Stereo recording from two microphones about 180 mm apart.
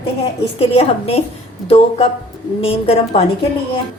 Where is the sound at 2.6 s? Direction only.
35° left (ahead or behind).